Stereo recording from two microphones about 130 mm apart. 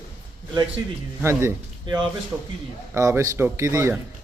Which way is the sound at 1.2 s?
20° right (ahead or behind).